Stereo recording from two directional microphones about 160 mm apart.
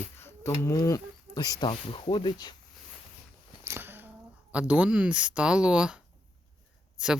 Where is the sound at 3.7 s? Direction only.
15° right (ahead or behind).